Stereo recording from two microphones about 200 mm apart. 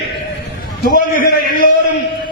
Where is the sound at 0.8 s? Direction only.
45° left (ahead or behind).